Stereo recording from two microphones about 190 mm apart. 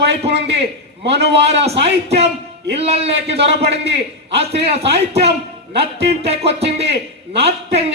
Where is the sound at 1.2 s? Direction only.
35° right (ahead or behind).